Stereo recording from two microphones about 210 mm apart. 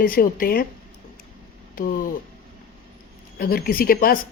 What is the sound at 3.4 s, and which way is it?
Speech, 45° left (ahead or behind).